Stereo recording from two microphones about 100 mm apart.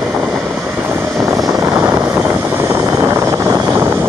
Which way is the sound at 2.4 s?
25° right (ahead or behind).